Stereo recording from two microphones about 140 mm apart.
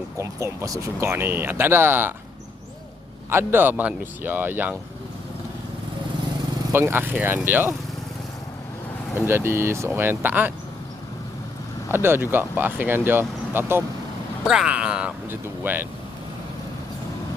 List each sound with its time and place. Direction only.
0.2 s speech: 20° right (ahead or behind)
3.2 s speech: 15° right (ahead or behind)
6.7 s speech: 15° right (ahead or behind)
9.2 s speech: 15° right (ahead or behind)
11.9 s speech: 15° right (ahead or behind)
14.4 s speech: 5° right (ahead or behind)